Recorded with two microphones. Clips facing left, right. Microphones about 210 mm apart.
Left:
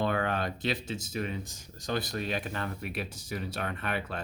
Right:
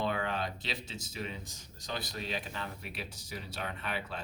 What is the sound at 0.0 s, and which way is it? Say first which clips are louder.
Speech: left 4 dB; 55° left (ahead or behind).